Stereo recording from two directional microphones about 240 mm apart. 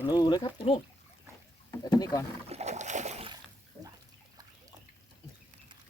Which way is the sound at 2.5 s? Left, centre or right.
Right.